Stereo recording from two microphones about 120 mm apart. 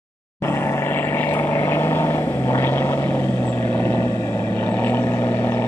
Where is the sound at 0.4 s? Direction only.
20° left (ahead or behind).